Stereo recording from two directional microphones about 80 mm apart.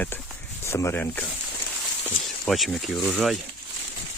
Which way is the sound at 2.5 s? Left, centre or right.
Centre.